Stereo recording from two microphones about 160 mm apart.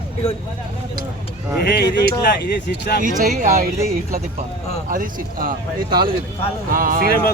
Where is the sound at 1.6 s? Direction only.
80° left.